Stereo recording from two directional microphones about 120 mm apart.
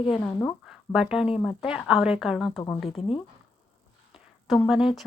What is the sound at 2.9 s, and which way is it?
Speech, 50° left (ahead or behind).